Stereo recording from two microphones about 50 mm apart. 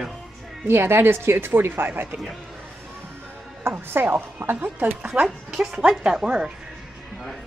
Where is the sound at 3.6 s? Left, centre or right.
Right.